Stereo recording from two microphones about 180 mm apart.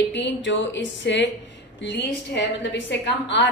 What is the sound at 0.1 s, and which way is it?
Speech, 80° left.